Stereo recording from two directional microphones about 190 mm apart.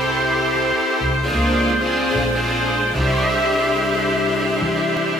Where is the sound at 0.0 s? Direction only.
Centre (ahead or behind).